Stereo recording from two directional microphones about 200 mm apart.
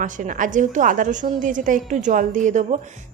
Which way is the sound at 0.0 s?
40° right (ahead or behind).